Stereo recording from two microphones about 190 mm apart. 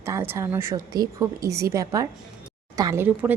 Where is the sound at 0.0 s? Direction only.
15° right (ahead or behind).